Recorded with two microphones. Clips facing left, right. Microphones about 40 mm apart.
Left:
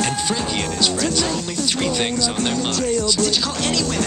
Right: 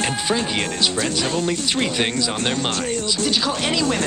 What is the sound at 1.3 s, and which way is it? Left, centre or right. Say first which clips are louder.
Speech: right 1 dB; right.